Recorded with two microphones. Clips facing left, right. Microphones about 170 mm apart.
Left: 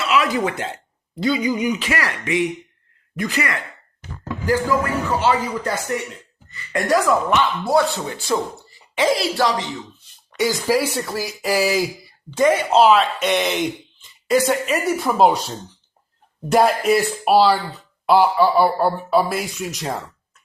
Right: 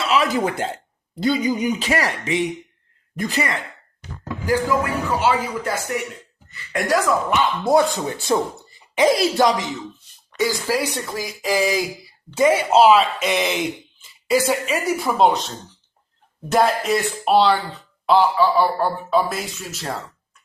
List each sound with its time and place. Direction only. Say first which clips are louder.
0.1 s speech: even; 45° right (ahead or behind)
4.2 s a man's voice: left 1 dB; 15° right (ahead or behind)
6.5 s speech: left 2 dB; centre (ahead or behind)
7.6 s a woman's voice: right 1 dB; 20° right (ahead or behind)
10.3 s speech: left 2 dB; 15° left (ahead or behind)
12.4 s speech: even; 10° right (ahead or behind); by 19.9 s 15° left (ahead or behind)